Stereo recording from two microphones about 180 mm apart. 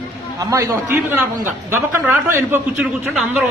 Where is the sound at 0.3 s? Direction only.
15° right (ahead or behind).